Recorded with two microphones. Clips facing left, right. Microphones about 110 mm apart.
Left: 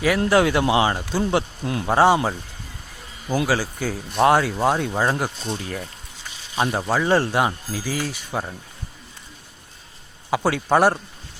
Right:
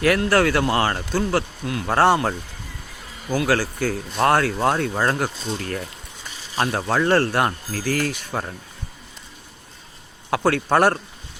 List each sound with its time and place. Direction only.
0.3 s speech: 15° left (ahead or behind)
1.9 s speech: 10° left (ahead or behind)
10.2 s speech: 5° left (ahead or behind)